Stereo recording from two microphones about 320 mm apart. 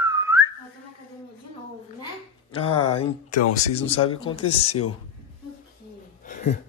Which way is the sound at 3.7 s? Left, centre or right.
Centre.